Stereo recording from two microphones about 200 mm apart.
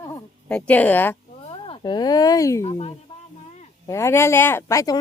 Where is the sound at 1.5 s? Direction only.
25° left (ahead or behind).